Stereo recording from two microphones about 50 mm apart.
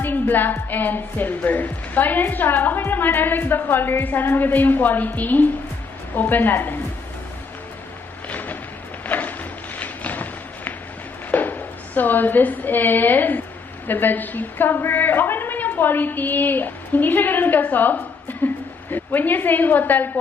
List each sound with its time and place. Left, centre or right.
0.0 s a woman's voice: left
8.3 s a sound: left
11.3 s a woman's voice: left